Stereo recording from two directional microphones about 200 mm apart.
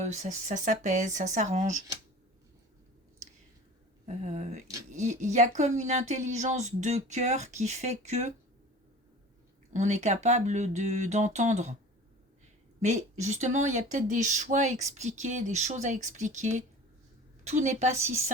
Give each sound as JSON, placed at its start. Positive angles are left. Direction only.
{"t": 0.0, "sound": "speech", "side_deg": -35}
{"t": 4.0, "sound": "speech", "side_deg": -35}
{"t": 9.7, "sound": "speech", "side_deg": -35}
{"t": 12.8, "sound": "speech", "side_deg": -35}